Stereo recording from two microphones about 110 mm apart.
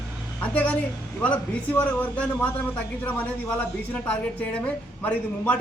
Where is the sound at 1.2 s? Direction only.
15° left (ahead or behind).